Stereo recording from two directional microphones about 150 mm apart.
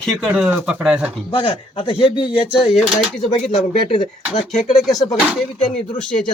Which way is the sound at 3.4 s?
5° left (ahead or behind).